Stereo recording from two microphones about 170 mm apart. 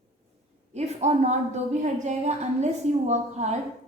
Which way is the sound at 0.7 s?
40° right (ahead or behind).